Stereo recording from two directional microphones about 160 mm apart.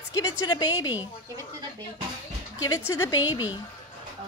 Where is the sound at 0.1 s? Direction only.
20° left (ahead or behind).